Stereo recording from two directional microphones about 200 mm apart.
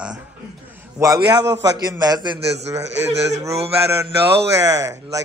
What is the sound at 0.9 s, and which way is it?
A man's voice, 15° right (ahead or behind).